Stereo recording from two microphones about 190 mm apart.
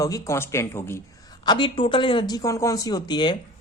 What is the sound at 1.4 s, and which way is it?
Speech, 25° left (ahead or behind).